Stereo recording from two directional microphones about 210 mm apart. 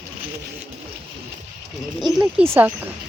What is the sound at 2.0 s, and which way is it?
Speech, centre (ahead or behind).